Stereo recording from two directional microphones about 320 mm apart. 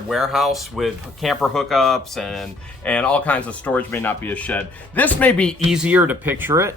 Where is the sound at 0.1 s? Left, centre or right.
Centre.